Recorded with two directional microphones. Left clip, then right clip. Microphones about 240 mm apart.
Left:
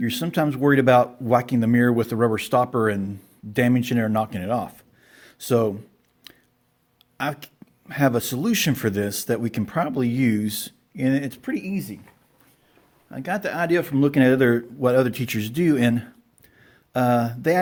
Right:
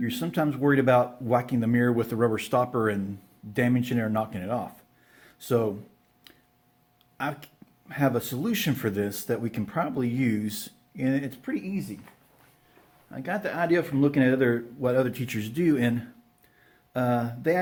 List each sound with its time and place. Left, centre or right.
0.0 s a man's voice: left
6.3 s a sound: left
7.2 s a man's voice: left
13.1 s a man's voice: left